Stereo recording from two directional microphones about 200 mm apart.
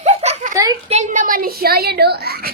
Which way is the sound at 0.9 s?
35° right (ahead or behind).